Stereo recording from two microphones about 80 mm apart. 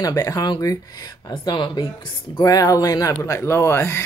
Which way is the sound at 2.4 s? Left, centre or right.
Left.